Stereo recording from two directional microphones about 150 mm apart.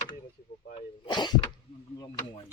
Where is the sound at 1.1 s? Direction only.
30° left (ahead or behind).